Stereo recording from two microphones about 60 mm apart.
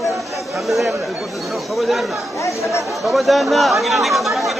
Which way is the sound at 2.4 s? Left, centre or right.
Left.